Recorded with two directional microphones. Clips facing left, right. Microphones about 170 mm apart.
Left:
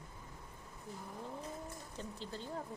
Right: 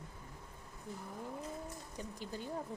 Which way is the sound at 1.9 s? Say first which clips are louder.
Right 1 dB; 10° right (ahead or behind).